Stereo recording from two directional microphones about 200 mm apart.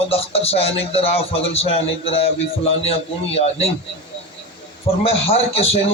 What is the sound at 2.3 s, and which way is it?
Speech, 70° left (ahead or behind).